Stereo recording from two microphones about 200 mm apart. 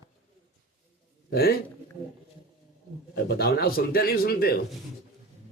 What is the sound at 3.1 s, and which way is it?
A man's voice, 50° left (ahead or behind).